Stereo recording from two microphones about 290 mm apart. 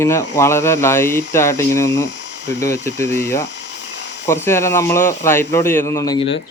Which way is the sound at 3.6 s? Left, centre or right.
Left.